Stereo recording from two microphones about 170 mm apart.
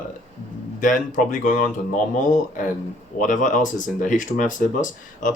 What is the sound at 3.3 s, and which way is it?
Speech, 50° left (ahead or behind).